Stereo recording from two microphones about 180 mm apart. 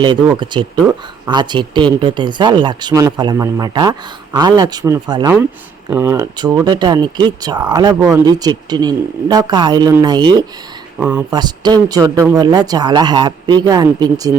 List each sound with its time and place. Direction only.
0.0 s speech: 25° right (ahead or behind)
10.9 s speech: 10° right (ahead or behind)
11.3 s speech: 20° right (ahead or behind)